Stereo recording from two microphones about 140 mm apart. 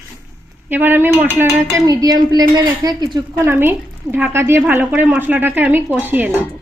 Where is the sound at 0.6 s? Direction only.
15° right (ahead or behind); by 3.2 s 30° right (ahead or behind).